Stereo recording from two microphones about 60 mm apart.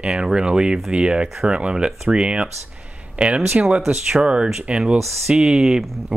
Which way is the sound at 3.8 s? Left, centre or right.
Centre.